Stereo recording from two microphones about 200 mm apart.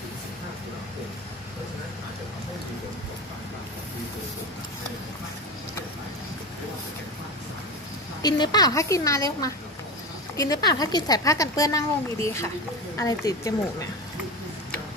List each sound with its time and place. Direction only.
8.2 s a woman's voice: 20° left (ahead or behind)